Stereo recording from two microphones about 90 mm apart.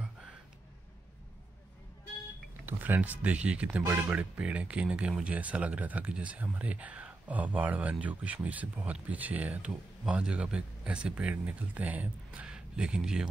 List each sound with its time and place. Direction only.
2.6 s speech: 20° right (ahead or behind)